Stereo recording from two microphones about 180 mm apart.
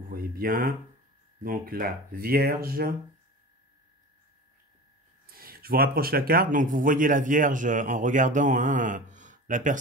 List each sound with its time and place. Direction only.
0.1 s speech: 55° right (ahead or behind)
5.2 s speech: 55° right (ahead or behind)